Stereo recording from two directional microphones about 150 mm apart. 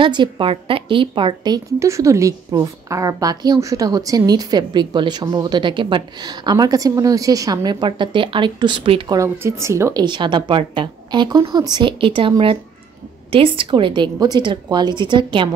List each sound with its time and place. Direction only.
0.0 s a woman's voice: 35° right (ahead or behind)
9.1 s a woman's voice: 20° right (ahead or behind)
10.0 s a woman's voice: 30° right (ahead or behind)